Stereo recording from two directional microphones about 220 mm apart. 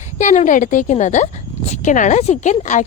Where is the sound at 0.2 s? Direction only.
35° left (ahead or behind).